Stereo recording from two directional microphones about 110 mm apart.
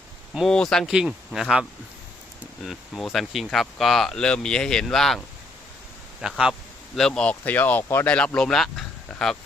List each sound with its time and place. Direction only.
0.3 s speech: 5° left (ahead or behind)
2.6 s speech: centre (ahead or behind)
6.2 s speech: 5° right (ahead or behind)